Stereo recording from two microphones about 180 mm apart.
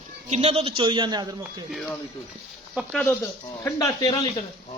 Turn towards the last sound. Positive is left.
turn(degrees=20)  # may be behind; listen again after turning